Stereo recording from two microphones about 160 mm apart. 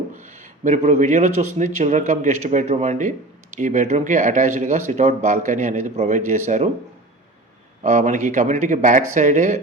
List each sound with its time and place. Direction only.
0.1 s a man's voice: 50° right (ahead or behind)
7.9 s a man's voice: 50° right (ahead or behind)